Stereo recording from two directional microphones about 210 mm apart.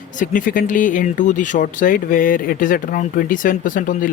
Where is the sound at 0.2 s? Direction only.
40° left (ahead or behind).